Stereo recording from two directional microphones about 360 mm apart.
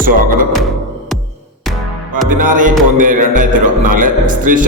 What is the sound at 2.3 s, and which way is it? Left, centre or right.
Music, right.